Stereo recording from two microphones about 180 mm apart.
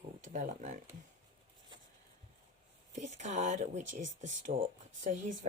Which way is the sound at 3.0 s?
40° right (ahead or behind).